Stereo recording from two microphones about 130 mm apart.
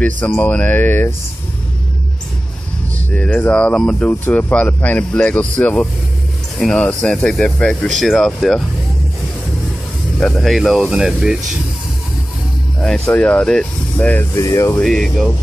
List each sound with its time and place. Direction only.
0.0 s speech: 10° left (ahead or behind)
3.1 s speech: 10° left (ahead or behind)
10.2 s speech: 5° left (ahead or behind)
13.0 s speech: 10° left (ahead or behind)
14.3 s speech: 25° left (ahead or behind)
14.8 s speech: 5° left (ahead or behind)